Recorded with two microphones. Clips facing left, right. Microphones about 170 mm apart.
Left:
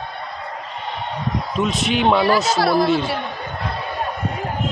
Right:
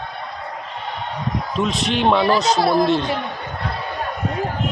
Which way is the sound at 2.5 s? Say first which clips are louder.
Even; 20° right (ahead or behind).